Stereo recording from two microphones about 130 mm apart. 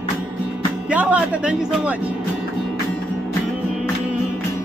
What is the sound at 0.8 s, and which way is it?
A man's voice, 10° right (ahead or behind).